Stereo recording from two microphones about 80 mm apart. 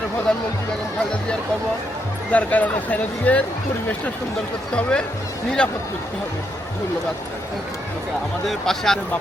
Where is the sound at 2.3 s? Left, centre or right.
Centre.